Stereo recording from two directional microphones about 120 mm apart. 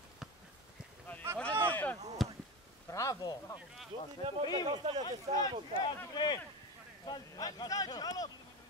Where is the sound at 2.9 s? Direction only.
25° left (ahead or behind).